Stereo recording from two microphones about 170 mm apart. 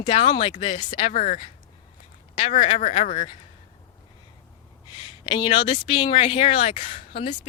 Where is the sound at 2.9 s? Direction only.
45° left (ahead or behind).